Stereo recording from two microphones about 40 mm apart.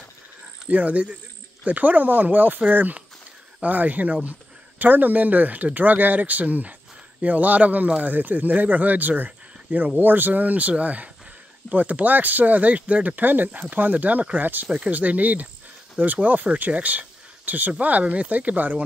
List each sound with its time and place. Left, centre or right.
0.7 s speech: right